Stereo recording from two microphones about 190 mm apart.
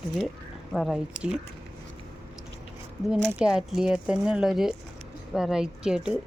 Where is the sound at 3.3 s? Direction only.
5° right (ahead or behind).